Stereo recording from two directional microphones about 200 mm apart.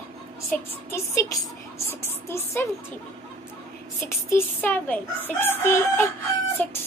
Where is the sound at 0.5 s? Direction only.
10° left (ahead or behind).